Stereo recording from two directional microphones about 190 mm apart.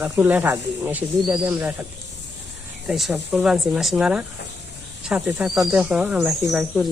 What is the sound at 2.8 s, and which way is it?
Speech, 5° right (ahead or behind).